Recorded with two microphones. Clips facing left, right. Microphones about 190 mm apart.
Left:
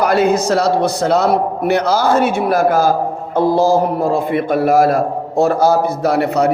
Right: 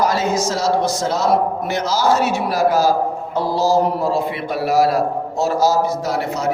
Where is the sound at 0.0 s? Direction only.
60° left (ahead or behind).